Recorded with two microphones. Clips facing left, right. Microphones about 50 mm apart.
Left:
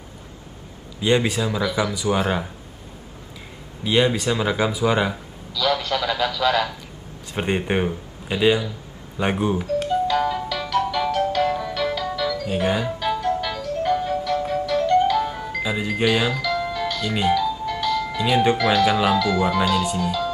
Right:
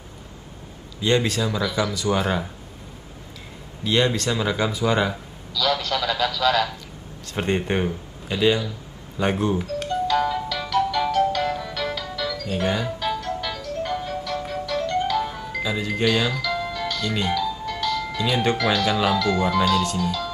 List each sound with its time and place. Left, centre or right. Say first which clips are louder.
1.0 s speech: left 1 dB; centre
3.8 s speech: left 2 dB; centre
9.8 s music: left 2 dB; centre
15.3 s speech: left 1 dB; centre